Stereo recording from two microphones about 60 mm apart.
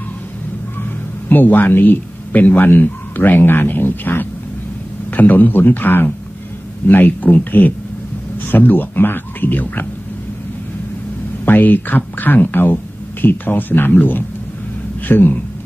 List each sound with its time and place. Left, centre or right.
1.3 s a man's voice: left
11.4 s speech: left